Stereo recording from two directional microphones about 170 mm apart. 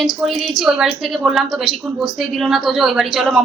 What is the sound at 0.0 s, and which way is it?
A woman's voice, centre (ahead or behind).